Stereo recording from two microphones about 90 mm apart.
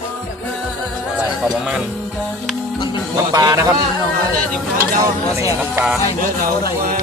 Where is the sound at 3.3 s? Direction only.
40° right (ahead or behind).